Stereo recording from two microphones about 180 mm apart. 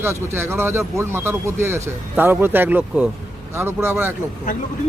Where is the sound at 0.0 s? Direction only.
15° right (ahead or behind).